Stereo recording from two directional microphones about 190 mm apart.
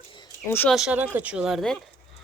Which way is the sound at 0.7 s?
5° right (ahead or behind).